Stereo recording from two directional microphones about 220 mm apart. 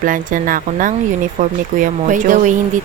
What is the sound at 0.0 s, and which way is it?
Speech, 40° right (ahead or behind).